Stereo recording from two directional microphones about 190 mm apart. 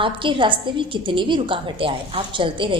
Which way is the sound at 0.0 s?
25° right (ahead or behind).